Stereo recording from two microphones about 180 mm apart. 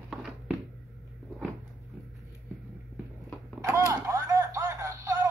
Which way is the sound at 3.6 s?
15° right (ahead or behind).